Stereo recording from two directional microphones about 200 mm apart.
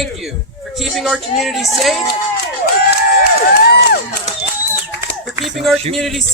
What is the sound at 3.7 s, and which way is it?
Music, 55° left (ahead or behind).